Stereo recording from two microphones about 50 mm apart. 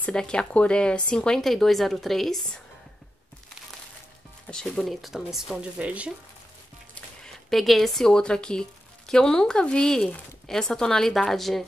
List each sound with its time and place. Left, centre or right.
0.1 s speech: centre
1.4 s speech: centre
4.5 s speech: centre
4.8 s speech: centre
5.6 s speech: right
7.2 s speech: centre
8.1 s speech: centre